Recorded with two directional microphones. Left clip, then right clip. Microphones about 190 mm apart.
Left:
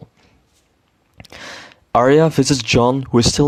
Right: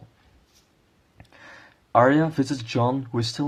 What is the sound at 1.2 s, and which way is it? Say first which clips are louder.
Speech: left 12 dB; 45° left (ahead or behind).